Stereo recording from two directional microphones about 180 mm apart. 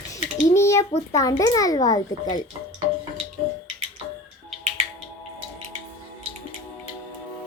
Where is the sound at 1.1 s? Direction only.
20° left (ahead or behind).